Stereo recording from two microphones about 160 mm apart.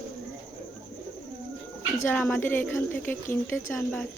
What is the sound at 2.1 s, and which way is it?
Speech, 10° left (ahead or behind).